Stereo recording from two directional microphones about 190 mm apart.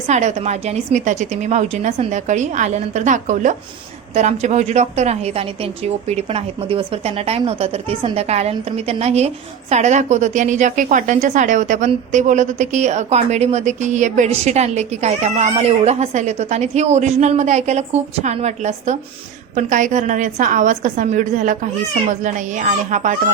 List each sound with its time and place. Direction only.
0.1 s a woman's voice: 35° right (ahead or behind)